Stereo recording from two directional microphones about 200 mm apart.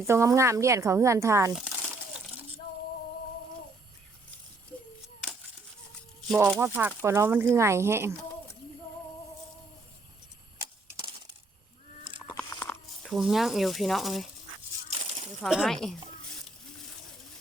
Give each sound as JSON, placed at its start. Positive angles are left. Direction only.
{"t": 0.0, "sound": "speech", "side_deg": -15}
{"t": 6.2, "sound": "speech", "side_deg": 0}
{"t": 10.6, "sound": "a sound", "side_deg": -15}
{"t": 12.3, "sound": "crunch", "side_deg": 10}
{"t": 13.0, "sound": "speech", "side_deg": 0}
{"t": 15.4, "sound": "speech", "side_deg": 0}